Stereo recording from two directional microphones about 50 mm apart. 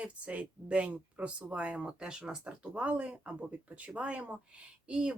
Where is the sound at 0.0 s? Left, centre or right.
Right.